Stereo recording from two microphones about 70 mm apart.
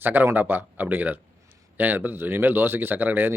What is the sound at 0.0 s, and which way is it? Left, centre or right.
Speech, right.